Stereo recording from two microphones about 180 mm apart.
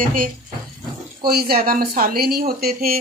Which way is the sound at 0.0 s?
50° right (ahead or behind).